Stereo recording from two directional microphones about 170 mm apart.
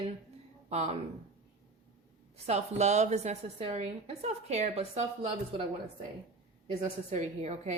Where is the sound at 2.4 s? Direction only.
40° right (ahead or behind).